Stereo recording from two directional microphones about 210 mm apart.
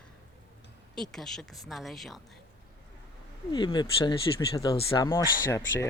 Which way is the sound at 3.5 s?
20° left (ahead or behind).